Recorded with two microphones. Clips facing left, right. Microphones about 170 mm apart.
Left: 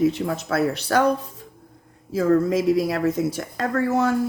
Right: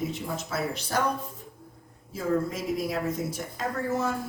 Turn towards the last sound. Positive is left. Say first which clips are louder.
# left 7 dB
turn(degrees=80)